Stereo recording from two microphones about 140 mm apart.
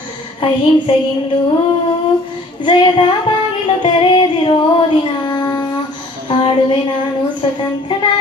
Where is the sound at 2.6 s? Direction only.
35° left (ahead or behind).